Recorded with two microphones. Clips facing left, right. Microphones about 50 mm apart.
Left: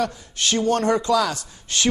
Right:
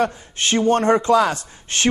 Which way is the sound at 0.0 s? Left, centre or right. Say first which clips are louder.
Right 3 dB; right.